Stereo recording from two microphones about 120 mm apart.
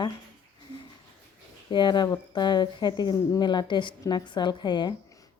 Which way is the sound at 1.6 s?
40° left (ahead or behind).